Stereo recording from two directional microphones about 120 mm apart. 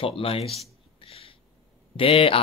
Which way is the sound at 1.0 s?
50° left (ahead or behind).